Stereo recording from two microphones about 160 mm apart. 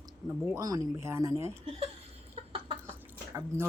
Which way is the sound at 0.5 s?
20° right (ahead or behind).